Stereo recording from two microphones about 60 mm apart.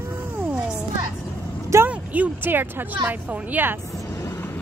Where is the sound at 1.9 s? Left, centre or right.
Right.